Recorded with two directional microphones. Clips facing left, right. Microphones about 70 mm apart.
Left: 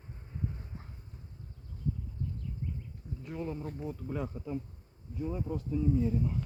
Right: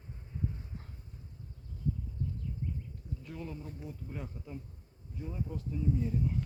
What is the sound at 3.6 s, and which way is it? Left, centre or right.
Speech, left.